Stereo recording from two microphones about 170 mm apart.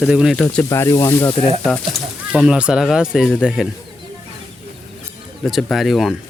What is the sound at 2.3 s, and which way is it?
Speech, 5° right (ahead or behind).